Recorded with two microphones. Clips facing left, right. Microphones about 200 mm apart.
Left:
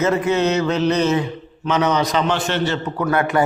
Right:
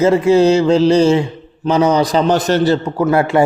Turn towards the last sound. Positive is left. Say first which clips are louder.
# right 5 dB
turn(degrees=-30)  # may be behind; listen again after turning